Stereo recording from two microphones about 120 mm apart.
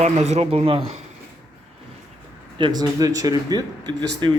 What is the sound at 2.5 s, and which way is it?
Speech, 40° right (ahead or behind).